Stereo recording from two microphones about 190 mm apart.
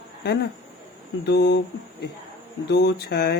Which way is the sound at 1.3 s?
60° left (ahead or behind).